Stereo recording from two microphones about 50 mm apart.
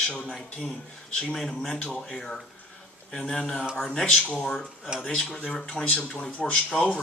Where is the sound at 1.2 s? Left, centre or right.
Centre.